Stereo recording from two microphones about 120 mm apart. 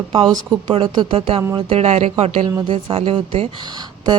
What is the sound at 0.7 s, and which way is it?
A woman's voice, 50° right (ahead or behind).